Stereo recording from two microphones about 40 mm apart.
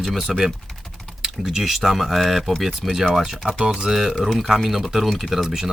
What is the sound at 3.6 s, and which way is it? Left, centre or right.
Speech, centre.